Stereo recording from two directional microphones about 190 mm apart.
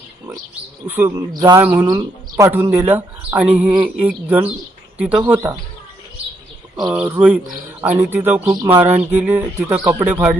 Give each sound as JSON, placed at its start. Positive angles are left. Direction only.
{"t": 0.9, "sound": "speech", "side_deg": -10}
{"t": 1.6, "sound": "speech", "side_deg": -10}
{"t": 6.9, "sound": "speech", "side_deg": -5}
{"t": 8.5, "sound": "speech", "side_deg": -20}
{"t": 9.1, "sound": "speech", "side_deg": -10}